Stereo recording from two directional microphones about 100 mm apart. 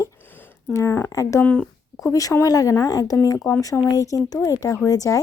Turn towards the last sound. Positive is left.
turn(degrees=35)  # may be behind; listen again after turning